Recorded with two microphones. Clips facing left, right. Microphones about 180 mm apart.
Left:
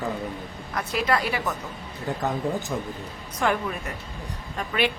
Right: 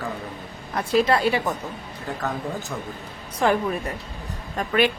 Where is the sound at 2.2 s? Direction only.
20° left (ahead or behind).